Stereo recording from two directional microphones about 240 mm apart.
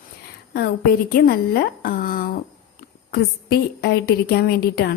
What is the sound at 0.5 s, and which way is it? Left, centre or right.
A woman's voice, left.